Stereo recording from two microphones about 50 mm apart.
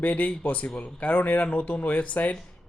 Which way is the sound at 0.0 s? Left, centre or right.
Left.